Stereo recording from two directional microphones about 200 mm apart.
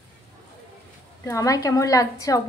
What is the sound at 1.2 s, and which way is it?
A woman's voice, 15° left (ahead or behind).